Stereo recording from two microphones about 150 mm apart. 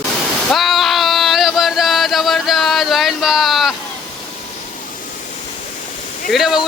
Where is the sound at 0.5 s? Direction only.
Centre (ahead or behind).